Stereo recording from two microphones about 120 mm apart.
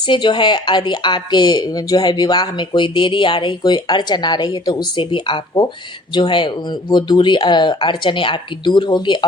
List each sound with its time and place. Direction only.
0.1 s speech: 40° left (ahead or behind)